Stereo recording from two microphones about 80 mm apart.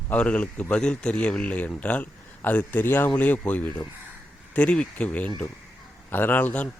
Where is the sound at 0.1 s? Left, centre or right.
Centre.